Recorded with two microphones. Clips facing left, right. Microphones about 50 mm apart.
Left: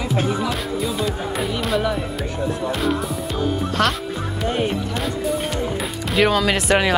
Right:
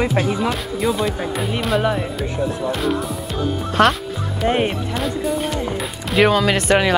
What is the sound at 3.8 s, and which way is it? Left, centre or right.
Speech, centre.